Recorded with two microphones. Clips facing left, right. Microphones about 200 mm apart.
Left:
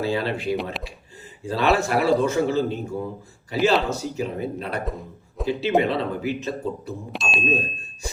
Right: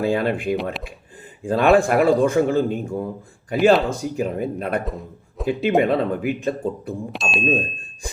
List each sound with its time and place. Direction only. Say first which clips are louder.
0.0 s a man's voice: right 4 dB; 50° right (ahead or behind)
0.5 s speech: right 3 dB; centre (ahead or behind)
1.4 s a man's voice: right 5 dB; 50° right (ahead or behind)
4.9 s a man's voice: right 1 dB; centre (ahead or behind)
5.8 s a man's voice: right 4 dB; 50° right (ahead or behind)
7.1 s speech: right 3 dB; centre (ahead or behind)